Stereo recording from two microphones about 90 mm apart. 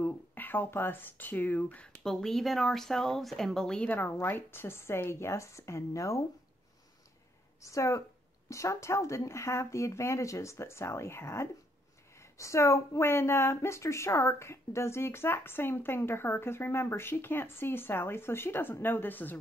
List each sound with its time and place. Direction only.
0.0 s speech: 20° left (ahead or behind)
2.0 s speech: 5° left (ahead or behind); by 6.2 s 35° left (ahead or behind)
7.6 s speech: 35° left (ahead or behind)